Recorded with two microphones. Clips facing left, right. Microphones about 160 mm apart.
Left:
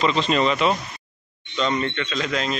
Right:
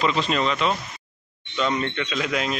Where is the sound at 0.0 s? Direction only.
5° right (ahead or behind).